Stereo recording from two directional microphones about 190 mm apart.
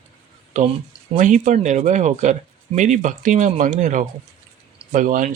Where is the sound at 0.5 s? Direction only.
40° right (ahead or behind).